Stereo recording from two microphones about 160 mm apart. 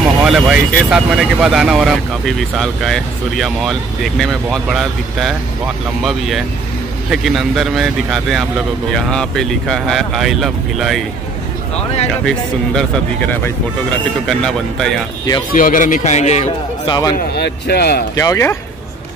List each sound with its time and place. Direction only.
0.0 s speech: 5° right (ahead or behind)
11.7 s speech: 40° left (ahead or behind)
12.3 s speech: 5° left (ahead or behind)
15.5 s speech: 55° left (ahead or behind)
16.8 s a man's voice: 25° left (ahead or behind)
17.4 s speech: 90° left
18.1 s speech: 20° left (ahead or behind)